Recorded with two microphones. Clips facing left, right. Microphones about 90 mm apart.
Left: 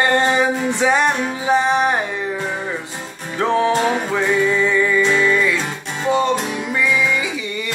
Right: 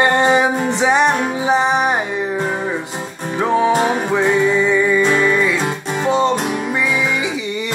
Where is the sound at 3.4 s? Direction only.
10° right (ahead or behind).